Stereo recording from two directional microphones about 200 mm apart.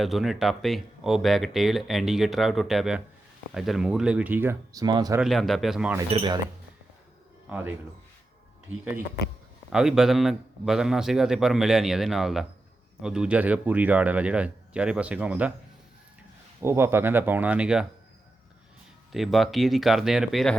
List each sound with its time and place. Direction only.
0.0 s speech: centre (ahead or behind); by 5.2 s 20° right (ahead or behind)
5.2 s speech: centre (ahead or behind)
6.1 s speech: 25° right (ahead or behind)
7.5 s speech: 10° right (ahead or behind)
9.7 s speech: centre (ahead or behind)
16.6 s speech: 10° right (ahead or behind)
19.1 s speech: centre (ahead or behind)